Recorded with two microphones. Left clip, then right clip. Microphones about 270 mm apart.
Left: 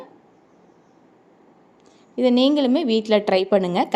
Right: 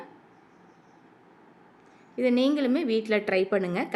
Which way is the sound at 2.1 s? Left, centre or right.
Centre.